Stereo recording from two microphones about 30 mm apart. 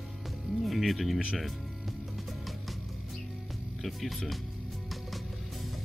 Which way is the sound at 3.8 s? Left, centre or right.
Centre.